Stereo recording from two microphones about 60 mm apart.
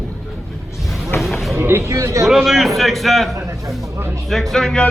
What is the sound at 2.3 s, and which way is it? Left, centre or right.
A man's voice, centre.